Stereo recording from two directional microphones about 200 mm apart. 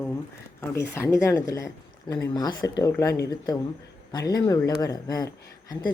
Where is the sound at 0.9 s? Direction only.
15° left (ahead or behind).